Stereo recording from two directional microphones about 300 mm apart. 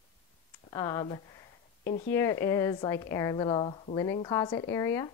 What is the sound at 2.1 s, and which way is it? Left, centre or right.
A woman's voice, centre.